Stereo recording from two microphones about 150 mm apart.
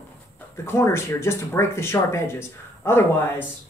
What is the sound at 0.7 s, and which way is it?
Speech, 15° left (ahead or behind).